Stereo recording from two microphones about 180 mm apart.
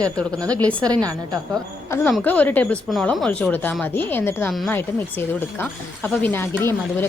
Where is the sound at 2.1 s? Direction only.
5° left (ahead or behind).